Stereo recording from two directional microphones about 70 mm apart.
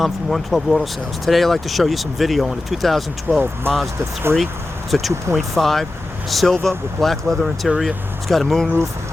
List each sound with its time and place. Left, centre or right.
0.0 s speech: centre
3.3 s speech: right
4.9 s speech: centre